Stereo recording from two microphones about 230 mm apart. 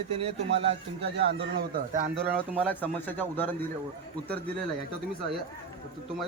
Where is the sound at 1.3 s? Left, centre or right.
Right.